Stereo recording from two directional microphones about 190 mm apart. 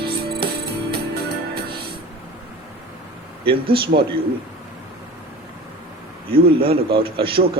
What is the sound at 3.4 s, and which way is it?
Speech, 30° right (ahead or behind).